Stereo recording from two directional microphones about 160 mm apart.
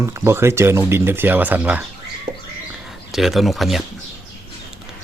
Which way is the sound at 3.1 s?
Centre (ahead or behind).